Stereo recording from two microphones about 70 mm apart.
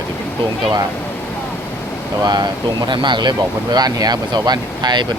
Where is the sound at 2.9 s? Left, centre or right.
Right.